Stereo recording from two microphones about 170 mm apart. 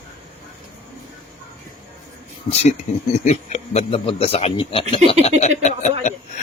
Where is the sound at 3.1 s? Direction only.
40° left (ahead or behind).